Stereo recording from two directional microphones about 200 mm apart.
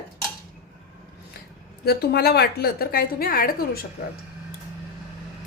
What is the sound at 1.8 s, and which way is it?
A woman's voice, 50° left (ahead or behind).